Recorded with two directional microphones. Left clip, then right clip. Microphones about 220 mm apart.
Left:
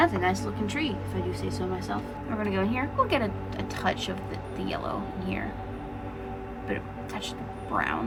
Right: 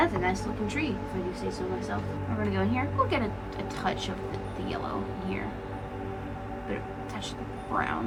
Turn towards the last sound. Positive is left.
turn(degrees=30)  # may be behind; listen again after turning